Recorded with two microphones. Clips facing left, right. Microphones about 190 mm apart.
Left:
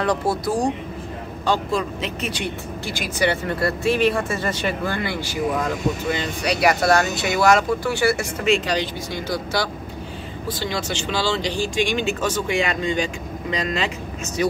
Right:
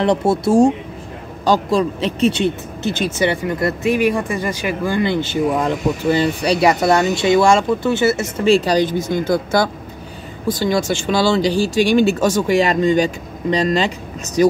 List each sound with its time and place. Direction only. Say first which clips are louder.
0.0 s speech: right 6 dB; 25° right (ahead or behind)
8.5 s speech: right 7 dB; 35° right (ahead or behind)